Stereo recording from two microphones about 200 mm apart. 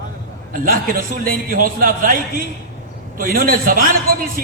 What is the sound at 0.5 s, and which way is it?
A man's voice, 45° right (ahead or behind).